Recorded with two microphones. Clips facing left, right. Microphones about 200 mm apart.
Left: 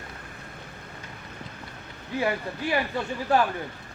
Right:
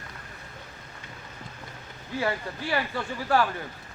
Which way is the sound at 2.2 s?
15° left (ahead or behind).